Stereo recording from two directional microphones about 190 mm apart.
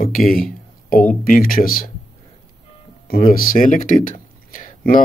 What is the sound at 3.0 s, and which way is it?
Speech, 50° left (ahead or behind).